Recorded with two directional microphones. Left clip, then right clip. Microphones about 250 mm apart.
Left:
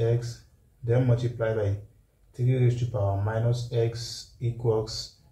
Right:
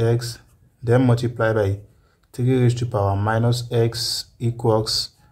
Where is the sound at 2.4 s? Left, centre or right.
Right.